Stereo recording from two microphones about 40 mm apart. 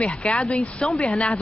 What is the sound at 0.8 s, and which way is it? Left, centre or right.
Speech, centre.